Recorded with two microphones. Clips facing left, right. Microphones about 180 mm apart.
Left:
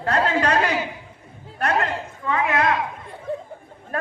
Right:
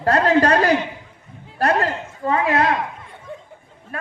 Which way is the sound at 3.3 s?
35° left (ahead or behind).